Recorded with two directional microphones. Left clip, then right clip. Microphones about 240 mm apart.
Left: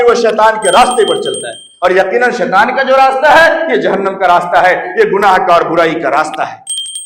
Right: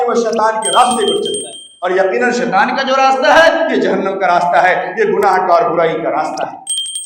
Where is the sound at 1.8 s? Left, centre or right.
Left.